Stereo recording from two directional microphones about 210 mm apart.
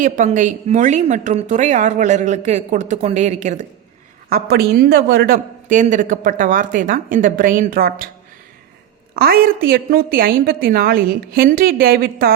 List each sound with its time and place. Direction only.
0.0 s a woman's voice: 40° right (ahead or behind)
4.3 s a woman's voice: 45° right (ahead or behind)
9.1 s a woman's voice: 45° right (ahead or behind)